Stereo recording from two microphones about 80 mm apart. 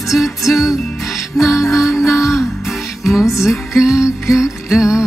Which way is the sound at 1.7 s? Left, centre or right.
Left.